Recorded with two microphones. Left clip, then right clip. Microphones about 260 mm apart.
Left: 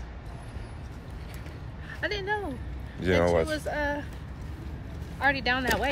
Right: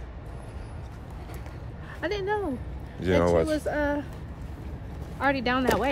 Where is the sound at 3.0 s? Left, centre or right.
Centre.